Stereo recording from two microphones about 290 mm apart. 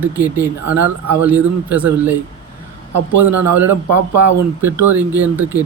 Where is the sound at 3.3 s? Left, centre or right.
Right.